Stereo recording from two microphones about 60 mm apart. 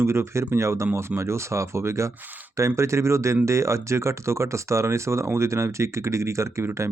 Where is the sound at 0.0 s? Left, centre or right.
Right.